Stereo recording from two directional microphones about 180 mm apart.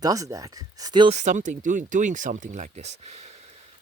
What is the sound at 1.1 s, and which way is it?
Speech, 40° right (ahead or behind).